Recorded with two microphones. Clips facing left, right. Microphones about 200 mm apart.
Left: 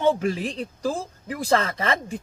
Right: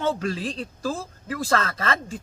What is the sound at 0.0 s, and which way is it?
Speech, 15° left (ahead or behind).